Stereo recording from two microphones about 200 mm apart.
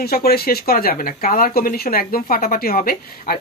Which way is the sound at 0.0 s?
50° left (ahead or behind).